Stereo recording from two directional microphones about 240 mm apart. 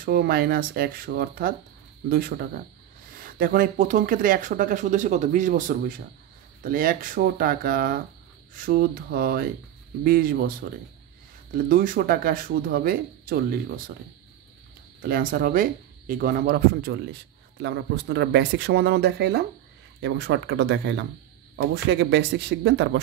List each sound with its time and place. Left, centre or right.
0.0 s speech: right
11.5 s speech: right
15.0 s speech: right